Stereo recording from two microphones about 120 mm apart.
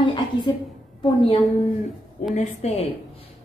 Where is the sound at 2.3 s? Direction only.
75° left (ahead or behind).